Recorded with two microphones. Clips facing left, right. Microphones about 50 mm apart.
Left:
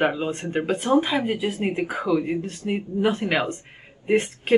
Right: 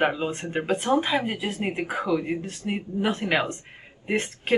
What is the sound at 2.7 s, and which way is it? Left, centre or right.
Speech, centre.